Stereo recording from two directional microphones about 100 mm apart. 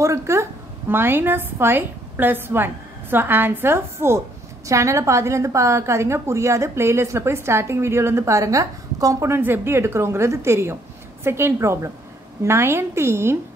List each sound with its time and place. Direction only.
0.0 s a woman's voice: 30° right (ahead or behind)
9.4 s a woman's voice: 25° right (ahead or behind)